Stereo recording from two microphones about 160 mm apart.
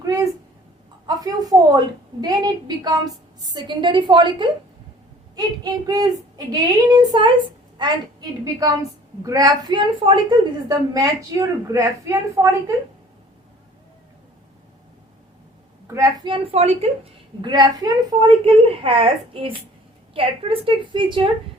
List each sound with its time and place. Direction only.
0.0 s a sound: 20° right (ahead or behind)
1.0 s a woman's voice: 25° right (ahead or behind)
9.2 s a woman's voice: 20° right (ahead or behind)
16.0 s a woman's voice: 30° right (ahead or behind)